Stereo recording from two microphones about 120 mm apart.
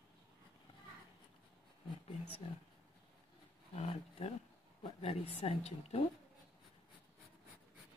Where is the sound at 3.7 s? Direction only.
60° left (ahead or behind).